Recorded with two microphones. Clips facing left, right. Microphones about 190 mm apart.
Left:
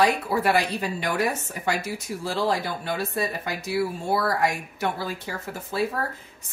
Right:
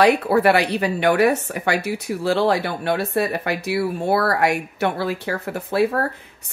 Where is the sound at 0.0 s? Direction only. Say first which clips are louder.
Right 7 dB; 65° right (ahead or behind).